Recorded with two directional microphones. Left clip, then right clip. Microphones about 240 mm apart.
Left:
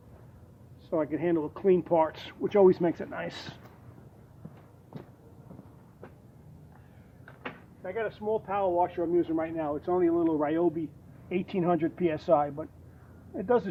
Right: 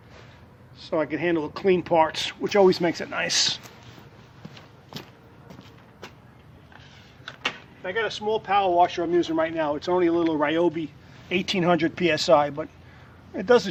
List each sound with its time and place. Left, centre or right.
0.9 s speech: centre
7.4 s speech: right